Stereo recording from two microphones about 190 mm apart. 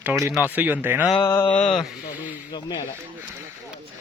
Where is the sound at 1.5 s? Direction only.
35° left (ahead or behind).